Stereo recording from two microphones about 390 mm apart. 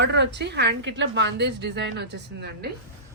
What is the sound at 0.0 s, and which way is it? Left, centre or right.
A woman's voice, right.